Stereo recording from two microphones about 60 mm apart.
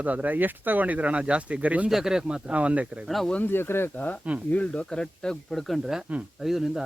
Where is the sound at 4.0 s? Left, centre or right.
Left.